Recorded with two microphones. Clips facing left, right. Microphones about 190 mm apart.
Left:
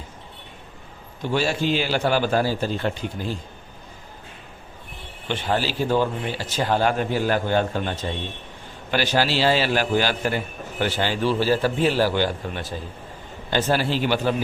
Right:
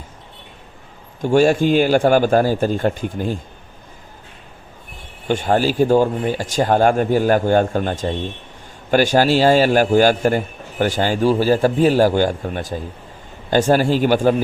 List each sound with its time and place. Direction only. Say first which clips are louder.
1.2 s a man's voice: right 9 dB; 50° right (ahead or behind)
5.3 s a man's voice: right 7 dB; 45° right (ahead or behind)